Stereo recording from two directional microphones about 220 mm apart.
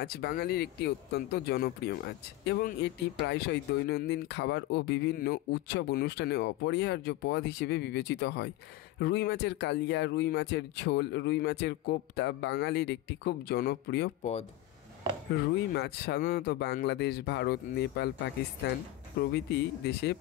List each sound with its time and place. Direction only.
0.0 s speech: 45° left (ahead or behind)
15.7 s speech: 45° left (ahead or behind)
19.1 s speech: 50° left (ahead or behind)